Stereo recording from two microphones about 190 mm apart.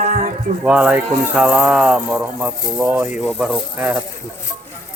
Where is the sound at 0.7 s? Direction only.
10° right (ahead or behind).